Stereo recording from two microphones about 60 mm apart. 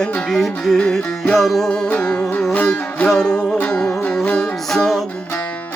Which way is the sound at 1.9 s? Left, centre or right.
Centre.